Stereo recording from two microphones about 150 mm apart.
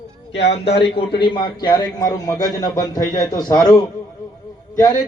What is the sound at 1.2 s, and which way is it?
A man's voice, 30° left (ahead or behind).